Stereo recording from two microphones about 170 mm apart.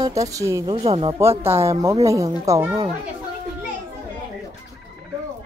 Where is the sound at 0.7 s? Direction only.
35° right (ahead or behind).